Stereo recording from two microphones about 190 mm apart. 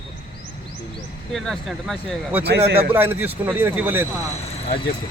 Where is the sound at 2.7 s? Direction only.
10° right (ahead or behind).